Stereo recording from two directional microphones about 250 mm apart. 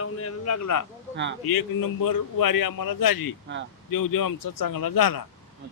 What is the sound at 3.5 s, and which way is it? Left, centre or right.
Speech, right.